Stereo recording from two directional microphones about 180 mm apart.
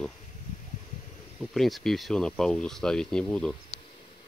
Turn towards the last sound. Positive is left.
turn(degrees=5)  # may be behind; listen again after turning